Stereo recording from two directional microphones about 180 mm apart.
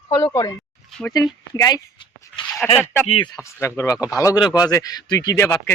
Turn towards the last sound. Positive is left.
turn(degrees=20)  # may be behind; listen again after turning